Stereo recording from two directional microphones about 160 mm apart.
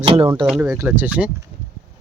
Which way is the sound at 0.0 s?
35° right (ahead or behind).